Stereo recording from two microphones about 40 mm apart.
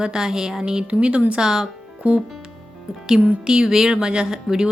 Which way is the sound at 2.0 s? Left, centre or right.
Right.